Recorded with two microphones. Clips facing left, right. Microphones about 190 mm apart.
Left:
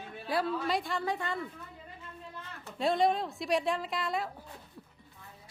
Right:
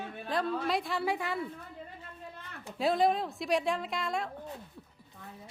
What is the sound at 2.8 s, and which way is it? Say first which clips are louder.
A woman's voice: even; centre (ahead or behind).